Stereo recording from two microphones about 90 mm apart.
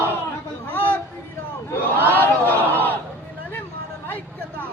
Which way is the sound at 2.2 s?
20° left (ahead or behind).